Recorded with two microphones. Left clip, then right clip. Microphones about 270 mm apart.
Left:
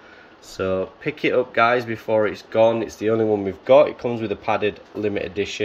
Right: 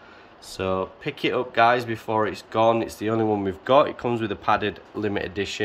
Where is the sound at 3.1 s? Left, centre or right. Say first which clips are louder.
Left 2 dB; right.